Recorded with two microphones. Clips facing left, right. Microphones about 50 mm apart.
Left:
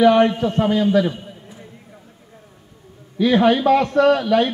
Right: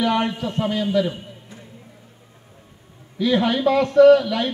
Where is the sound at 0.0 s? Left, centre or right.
Left.